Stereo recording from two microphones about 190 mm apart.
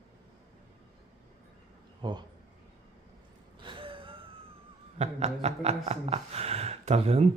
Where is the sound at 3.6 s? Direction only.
25° right (ahead or behind).